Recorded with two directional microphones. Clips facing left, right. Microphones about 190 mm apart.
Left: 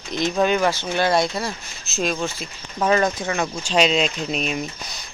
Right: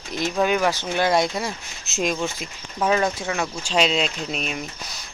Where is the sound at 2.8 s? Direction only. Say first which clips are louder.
Left 2 dB; 5° right (ahead or behind).